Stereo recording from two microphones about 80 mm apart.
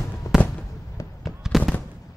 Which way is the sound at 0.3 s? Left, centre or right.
Centre.